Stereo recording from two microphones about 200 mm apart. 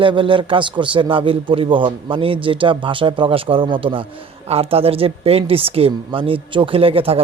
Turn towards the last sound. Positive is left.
turn(degrees=-30)  # may be behind; listen again after turning